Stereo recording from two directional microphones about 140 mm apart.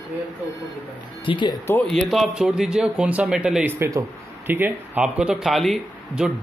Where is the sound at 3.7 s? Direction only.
20° right (ahead or behind); by 6.3 s centre (ahead or behind).